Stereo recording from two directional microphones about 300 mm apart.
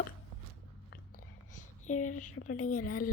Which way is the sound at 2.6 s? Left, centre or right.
Left.